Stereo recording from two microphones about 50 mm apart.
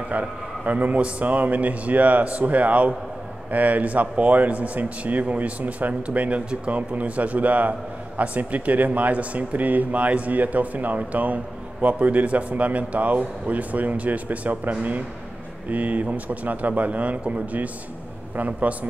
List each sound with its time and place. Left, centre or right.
0.1 s a man's voice: right